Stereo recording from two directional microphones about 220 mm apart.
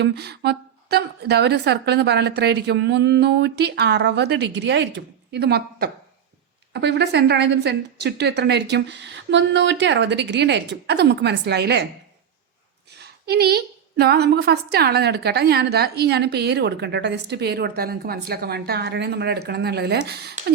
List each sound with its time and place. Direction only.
0.0 s a woman's voice: 50° right (ahead or behind)
12.9 s a woman's voice: 50° right (ahead or behind)